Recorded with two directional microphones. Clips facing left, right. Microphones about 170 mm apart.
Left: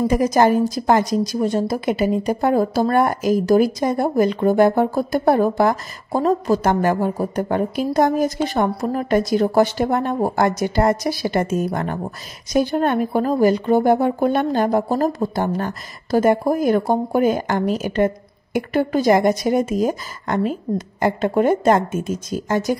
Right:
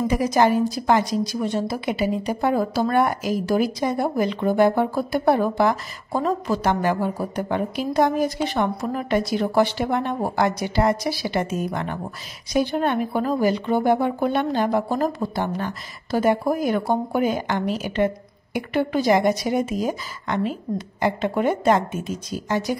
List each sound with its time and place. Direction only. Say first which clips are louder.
0.1 s a woman's voice: left 2 dB; 45° left (ahead or behind)